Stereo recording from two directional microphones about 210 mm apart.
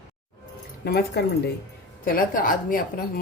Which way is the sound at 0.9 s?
50° left (ahead or behind).